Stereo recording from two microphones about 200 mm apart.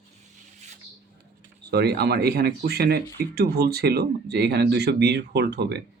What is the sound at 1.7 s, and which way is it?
Speech, 55° right (ahead or behind).